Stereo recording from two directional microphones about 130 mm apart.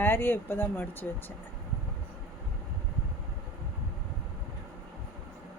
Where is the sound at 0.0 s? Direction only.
15° left (ahead or behind).